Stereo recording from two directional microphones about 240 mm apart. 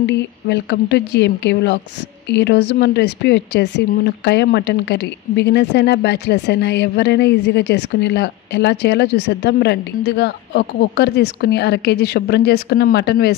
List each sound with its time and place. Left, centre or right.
0.0 s speech: left